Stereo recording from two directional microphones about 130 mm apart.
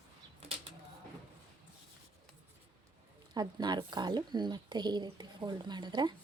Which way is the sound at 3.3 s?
35° right (ahead or behind).